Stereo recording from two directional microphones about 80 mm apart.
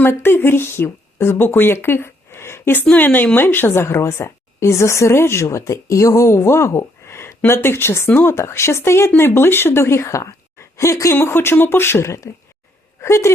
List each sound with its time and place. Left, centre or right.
0.0 s a woman's voice: left